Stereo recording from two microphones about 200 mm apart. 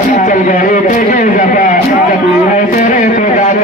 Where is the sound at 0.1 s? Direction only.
40° left (ahead or behind).